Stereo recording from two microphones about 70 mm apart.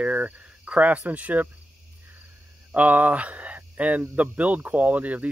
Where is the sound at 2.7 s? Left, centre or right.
Right.